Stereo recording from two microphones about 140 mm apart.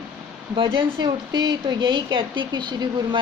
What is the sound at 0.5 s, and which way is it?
Speech, 35° right (ahead or behind).